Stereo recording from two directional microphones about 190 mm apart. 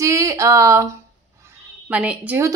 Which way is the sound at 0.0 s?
15° right (ahead or behind).